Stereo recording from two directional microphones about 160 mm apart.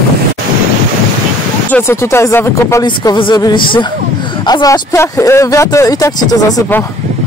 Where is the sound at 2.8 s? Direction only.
30° left (ahead or behind).